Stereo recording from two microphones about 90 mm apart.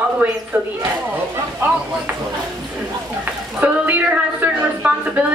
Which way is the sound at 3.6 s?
20° right (ahead or behind).